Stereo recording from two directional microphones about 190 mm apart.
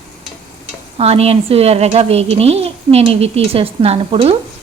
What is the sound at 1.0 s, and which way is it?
A woman's voice, 30° right (ahead or behind).